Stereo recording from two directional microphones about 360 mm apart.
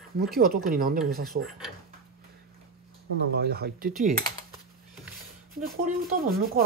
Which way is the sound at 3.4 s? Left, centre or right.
Right.